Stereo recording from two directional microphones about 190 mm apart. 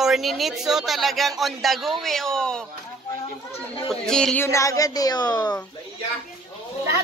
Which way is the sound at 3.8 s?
5° left (ahead or behind).